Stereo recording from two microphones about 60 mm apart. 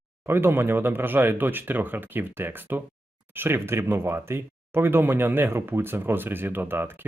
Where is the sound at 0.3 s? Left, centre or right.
Right.